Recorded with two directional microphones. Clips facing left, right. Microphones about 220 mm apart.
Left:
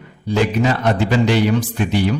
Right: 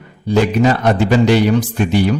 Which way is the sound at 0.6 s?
45° right (ahead or behind).